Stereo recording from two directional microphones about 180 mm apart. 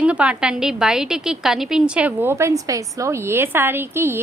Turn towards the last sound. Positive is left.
turn(degrees=-15)  # may be behind; listen again after turning